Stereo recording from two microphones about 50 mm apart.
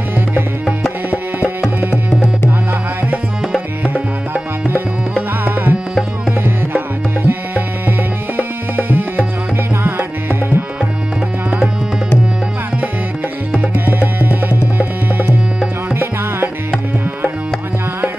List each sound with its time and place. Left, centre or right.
3.8 s music: right
5.4 s tabla: right
7.2 s tabla: right
8.4 s music: right
13.8 s tabla: right
15.9 s music: right